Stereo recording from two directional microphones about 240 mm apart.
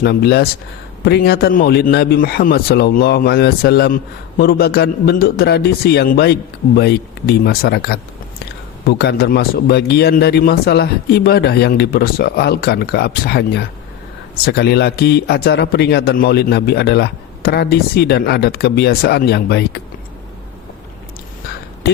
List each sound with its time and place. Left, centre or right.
0.0 s a man's voice: left